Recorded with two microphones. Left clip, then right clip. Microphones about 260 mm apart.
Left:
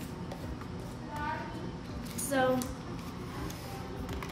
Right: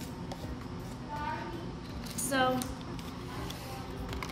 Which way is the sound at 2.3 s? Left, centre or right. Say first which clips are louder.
Even; centre.